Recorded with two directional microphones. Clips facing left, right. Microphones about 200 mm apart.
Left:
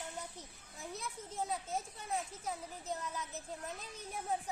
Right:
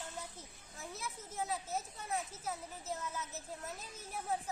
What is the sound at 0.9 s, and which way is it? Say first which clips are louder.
Speech: left 1 dB; 5° right (ahead or behind).